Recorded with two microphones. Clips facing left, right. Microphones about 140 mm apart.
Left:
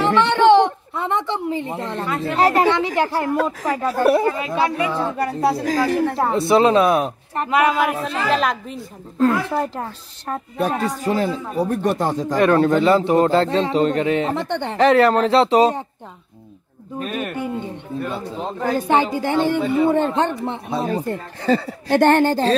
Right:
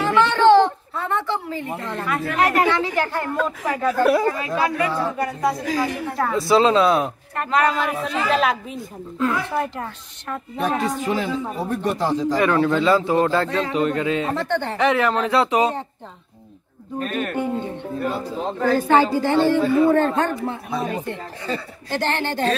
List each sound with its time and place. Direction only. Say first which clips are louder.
0.0 s a woman's voice: left 1 dB; 15° left (ahead or behind)
4.1 s speech: left 1 dB; 25° left (ahead or behind)
6.1 s a woman's voice: right 2 dB; 25° left (ahead or behind); by 8.7 s centre (ahead or behind)
9.2 s a woman's voice: left 4 dB; 40° left (ahead or behind)
12.8 s speech: left 2 dB; 25° left (ahead or behind)
14.8 s a woman's voice: left 7 dB; 35° left (ahead or behind)
17.0 s a woman's voice: right 1 dB; 5° left (ahead or behind)
18.6 s a woman's voice: right 1 dB; 15° left (ahead or behind); by 21.6 s 35° left (ahead or behind)
21.8 s speech: left 9 dB; 55° left (ahead or behind)